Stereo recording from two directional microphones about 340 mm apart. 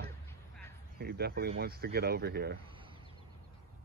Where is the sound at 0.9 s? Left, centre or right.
Right.